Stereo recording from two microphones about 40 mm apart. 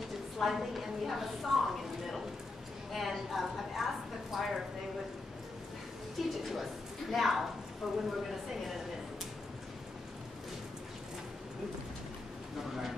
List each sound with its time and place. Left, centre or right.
0.4 s a woman's voice: centre
6.2 s a woman's voice: centre
6.5 s a woman's voice: centre